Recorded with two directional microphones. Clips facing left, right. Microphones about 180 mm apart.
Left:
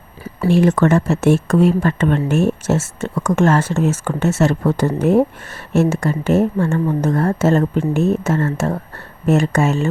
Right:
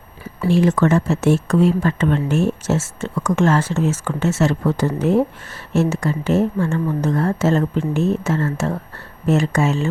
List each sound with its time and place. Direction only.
0.4 s a woman's voice: 55° left (ahead or behind)